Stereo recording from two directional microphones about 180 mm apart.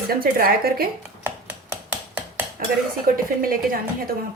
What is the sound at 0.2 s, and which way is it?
Speech, 55° right (ahead or behind).